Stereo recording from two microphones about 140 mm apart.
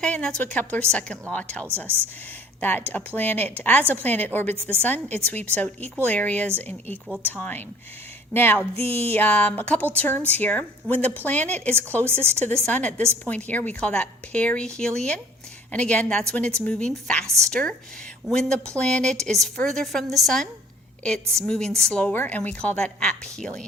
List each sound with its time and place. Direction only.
0.0 s a woman's voice: 5° left (ahead or behind)
7.1 s a woman's voice: 15° right (ahead or behind)
7.3 s a woman's voice: 15° left (ahead or behind)
12.0 s a woman's voice: 15° right (ahead or behind)
12.5 s a woman's voice: 10° left (ahead or behind)